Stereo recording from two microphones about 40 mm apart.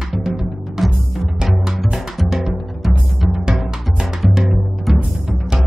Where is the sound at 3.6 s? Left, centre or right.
Centre.